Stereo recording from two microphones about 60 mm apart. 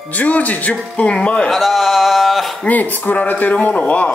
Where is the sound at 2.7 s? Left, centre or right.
Left.